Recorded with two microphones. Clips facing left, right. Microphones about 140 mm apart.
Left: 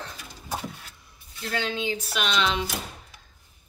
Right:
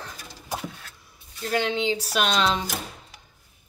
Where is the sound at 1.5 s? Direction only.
20° right (ahead or behind).